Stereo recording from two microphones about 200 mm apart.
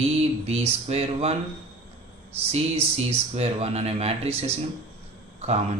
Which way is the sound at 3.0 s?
30° right (ahead or behind).